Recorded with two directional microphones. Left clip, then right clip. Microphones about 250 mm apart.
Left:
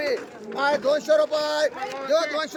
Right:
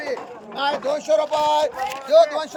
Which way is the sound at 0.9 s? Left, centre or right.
Centre.